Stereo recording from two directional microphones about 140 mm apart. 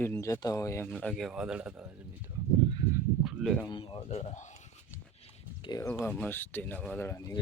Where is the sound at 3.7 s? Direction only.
40° left (ahead or behind); by 4.5 s 55° left (ahead or behind).